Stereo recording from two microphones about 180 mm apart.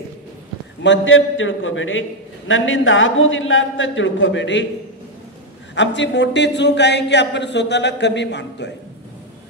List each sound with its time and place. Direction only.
0.8 s a man's voice: 90° left
5.8 s speech: 80° left